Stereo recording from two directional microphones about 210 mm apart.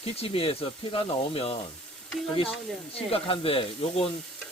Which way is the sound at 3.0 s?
25° left (ahead or behind).